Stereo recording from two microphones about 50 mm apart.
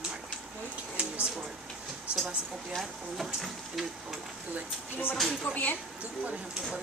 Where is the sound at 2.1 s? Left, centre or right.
Right.